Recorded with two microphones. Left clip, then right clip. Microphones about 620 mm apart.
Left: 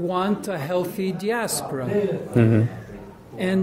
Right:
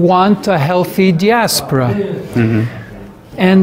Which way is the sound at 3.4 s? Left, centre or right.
Right.